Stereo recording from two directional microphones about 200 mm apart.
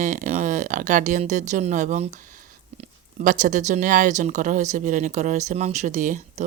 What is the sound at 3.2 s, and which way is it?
Speech, 40° right (ahead or behind).